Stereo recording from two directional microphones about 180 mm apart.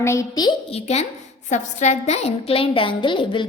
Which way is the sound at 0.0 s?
15° left (ahead or behind).